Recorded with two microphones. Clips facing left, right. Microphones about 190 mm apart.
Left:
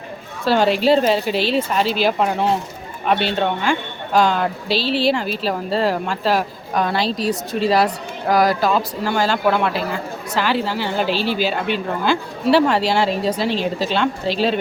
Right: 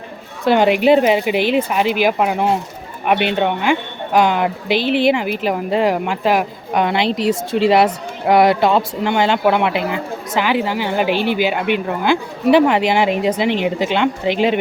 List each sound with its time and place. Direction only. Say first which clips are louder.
0.4 s speech: right 3 dB; 15° right (ahead or behind)